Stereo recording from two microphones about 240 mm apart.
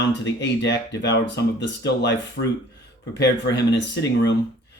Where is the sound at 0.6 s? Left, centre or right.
Left.